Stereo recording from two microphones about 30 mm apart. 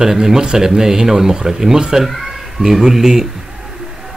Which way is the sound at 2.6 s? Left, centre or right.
Centre.